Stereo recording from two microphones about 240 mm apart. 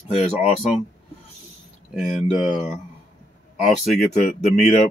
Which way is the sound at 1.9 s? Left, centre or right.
Centre.